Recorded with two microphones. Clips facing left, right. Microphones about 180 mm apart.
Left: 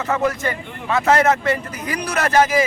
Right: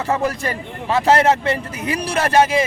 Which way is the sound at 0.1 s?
30° right (ahead or behind).